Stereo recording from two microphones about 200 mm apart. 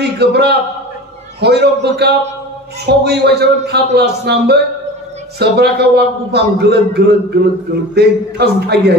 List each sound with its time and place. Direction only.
0.0 s a man's voice: 55° right (ahead or behind)